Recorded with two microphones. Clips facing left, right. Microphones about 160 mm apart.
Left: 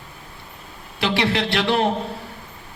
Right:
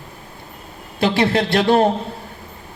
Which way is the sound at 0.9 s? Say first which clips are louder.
Right 4 dB; 40° right (ahead or behind).